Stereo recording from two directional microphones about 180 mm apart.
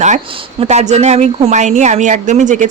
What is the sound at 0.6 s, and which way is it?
A woman's voice, 40° right (ahead or behind).